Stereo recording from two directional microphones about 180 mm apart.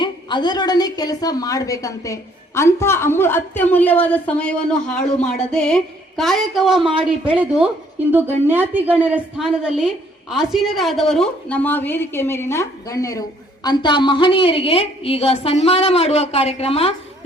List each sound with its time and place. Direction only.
0.0 s a woman's voice: 25° left (ahead or behind)